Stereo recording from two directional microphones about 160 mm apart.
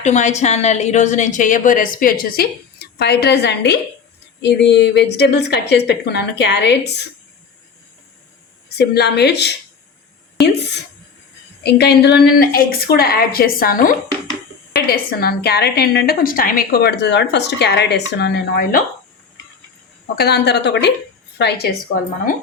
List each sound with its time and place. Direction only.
0.0 s a woman's voice: 50° left (ahead or behind); by 7.0 s 90° left
8.8 s a woman's voice: 90° left
11.6 s a woman's voice: 90° left
20.1 s a woman's voice: 90° left